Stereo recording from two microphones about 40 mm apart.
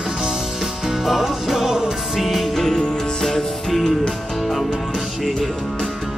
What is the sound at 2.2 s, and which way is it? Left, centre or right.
Music, centre.